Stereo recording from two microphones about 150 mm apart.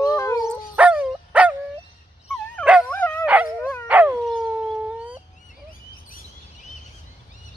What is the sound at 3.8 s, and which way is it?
Dog, 10° right (ahead or behind).